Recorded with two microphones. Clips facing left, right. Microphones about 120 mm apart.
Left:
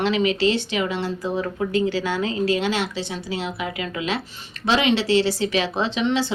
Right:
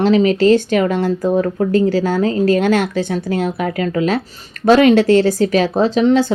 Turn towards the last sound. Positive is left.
turn(degrees=-45)  # may be behind; listen again after turning